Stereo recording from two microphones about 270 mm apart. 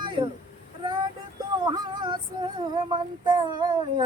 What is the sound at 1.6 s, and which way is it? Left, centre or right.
Female singing, centre.